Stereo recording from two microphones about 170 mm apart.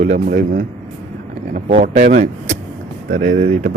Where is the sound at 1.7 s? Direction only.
50° right (ahead or behind).